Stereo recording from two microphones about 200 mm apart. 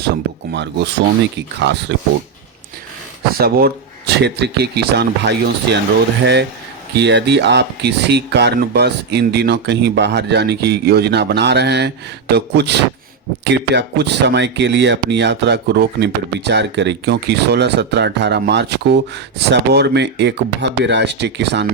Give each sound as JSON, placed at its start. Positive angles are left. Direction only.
{"t": 0.5, "sound": "speech", "side_deg": -60}
{"t": 3.3, "sound": "speech", "side_deg": -50}
{"t": 6.9, "sound": "speech", "side_deg": -60}